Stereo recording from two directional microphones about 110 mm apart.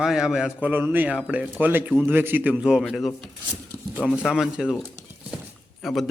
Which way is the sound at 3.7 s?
15° left (ahead or behind).